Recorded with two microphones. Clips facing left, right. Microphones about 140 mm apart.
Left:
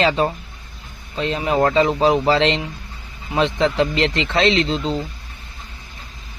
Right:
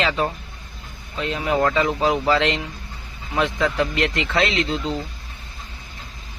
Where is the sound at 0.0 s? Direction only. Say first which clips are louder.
Left 4 dB; 30° left (ahead or behind).